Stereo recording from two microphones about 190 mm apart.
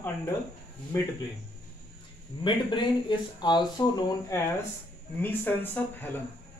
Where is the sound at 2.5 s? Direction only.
25° left (ahead or behind).